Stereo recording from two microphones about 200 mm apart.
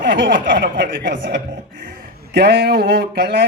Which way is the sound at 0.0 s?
60° right (ahead or behind).